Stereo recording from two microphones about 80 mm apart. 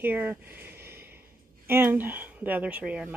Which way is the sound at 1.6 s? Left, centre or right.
Right.